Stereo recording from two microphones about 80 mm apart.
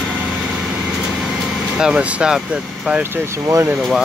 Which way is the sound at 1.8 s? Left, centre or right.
Centre.